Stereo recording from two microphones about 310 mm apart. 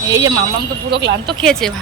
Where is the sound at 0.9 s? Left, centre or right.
Right.